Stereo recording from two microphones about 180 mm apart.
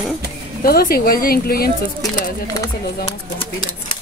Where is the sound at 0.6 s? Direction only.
55° left (ahead or behind).